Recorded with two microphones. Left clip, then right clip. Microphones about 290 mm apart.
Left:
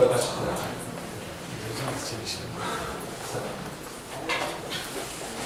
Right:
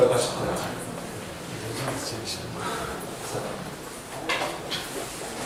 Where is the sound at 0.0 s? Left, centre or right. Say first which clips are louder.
Right 1 dB; centre.